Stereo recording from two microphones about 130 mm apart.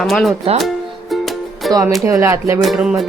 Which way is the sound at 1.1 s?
Centre (ahead or behind).